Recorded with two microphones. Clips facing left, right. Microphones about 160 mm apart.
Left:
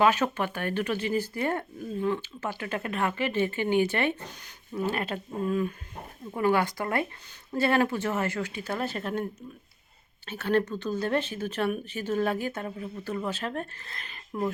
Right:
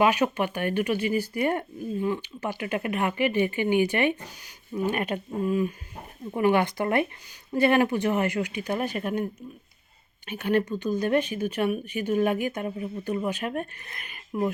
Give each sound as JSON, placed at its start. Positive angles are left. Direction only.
{"t": 0.0, "sound": "speech", "side_deg": -15}
{"t": 10.2, "sound": "speech", "side_deg": -15}